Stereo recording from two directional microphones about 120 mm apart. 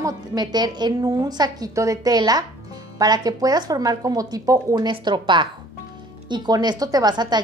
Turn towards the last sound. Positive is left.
turn(degrees=-35)  # may be behind; listen again after turning